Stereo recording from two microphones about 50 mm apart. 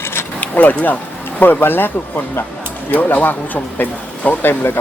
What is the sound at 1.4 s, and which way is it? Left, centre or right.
Speech, left.